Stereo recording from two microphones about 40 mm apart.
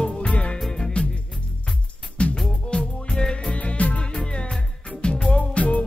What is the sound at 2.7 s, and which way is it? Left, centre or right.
Music, centre.